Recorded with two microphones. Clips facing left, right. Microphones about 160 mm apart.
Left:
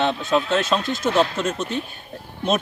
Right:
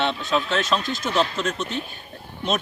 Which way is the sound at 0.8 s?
50° left (ahead or behind).